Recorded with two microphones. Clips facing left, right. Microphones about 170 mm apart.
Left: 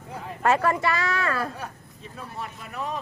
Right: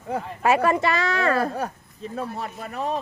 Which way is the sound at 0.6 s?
20° right (ahead or behind).